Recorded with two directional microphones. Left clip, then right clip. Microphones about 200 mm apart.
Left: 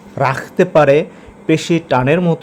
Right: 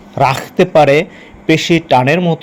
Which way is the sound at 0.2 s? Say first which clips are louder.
Right 3 dB; 5° right (ahead or behind).